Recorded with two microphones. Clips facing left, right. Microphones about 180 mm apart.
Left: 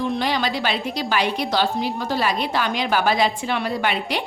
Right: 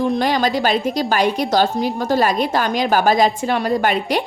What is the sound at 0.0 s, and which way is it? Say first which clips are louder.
A woman's voice: right 5 dB; 45° right (ahead or behind).